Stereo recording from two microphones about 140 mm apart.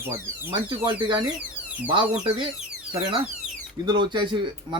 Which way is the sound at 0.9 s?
35° right (ahead or behind).